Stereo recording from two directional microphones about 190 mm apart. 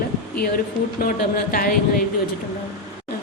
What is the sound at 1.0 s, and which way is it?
Speech, 50° left (ahead or behind).